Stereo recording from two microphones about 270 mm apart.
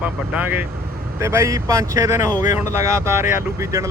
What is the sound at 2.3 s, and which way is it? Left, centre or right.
Speech, left.